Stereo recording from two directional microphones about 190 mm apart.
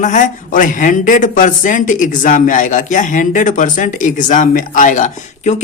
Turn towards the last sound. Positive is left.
turn(degrees=40)  # may be behind; listen again after turning